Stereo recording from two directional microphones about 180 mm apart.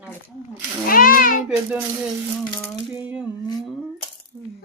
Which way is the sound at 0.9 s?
50° left (ahead or behind).